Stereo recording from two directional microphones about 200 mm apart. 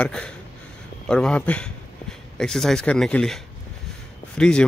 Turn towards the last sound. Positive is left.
turn(degrees=5)  # may be behind; listen again after turning